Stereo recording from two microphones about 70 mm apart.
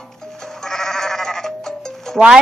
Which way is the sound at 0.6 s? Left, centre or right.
Centre.